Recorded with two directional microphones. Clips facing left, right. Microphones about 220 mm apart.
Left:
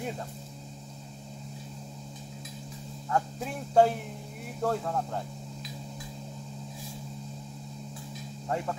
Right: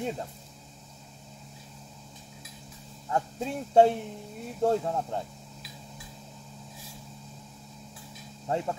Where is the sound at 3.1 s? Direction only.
25° right (ahead or behind).